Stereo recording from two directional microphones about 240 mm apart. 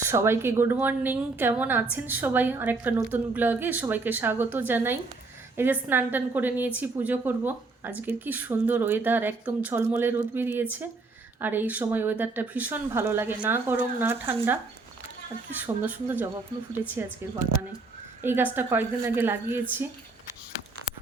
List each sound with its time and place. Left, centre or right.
0.0 s a woman's voice: centre
15.6 s a woman's voice: centre
18.2 s a woman's voice: centre